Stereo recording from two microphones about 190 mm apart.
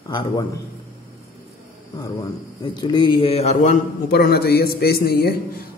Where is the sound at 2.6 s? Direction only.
25° left (ahead or behind).